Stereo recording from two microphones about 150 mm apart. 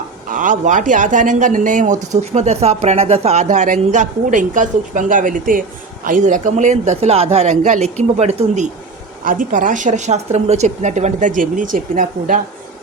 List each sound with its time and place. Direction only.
0.3 s speech: 60° right (ahead or behind)
9.2 s speech: 65° right (ahead or behind)